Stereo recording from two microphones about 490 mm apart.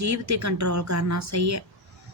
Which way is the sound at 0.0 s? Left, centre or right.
Right.